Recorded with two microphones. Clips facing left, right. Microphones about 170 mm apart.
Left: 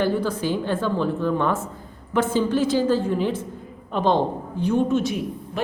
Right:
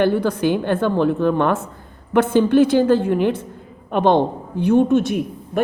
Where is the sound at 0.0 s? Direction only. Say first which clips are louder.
Right 5 dB; 60° right (ahead or behind).